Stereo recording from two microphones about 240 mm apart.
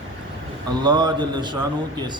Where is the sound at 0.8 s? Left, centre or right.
Centre.